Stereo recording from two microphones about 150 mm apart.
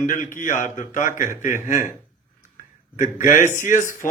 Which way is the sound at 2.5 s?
55° left (ahead or behind).